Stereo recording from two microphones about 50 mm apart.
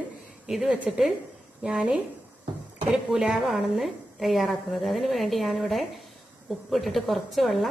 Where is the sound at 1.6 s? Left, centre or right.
Centre.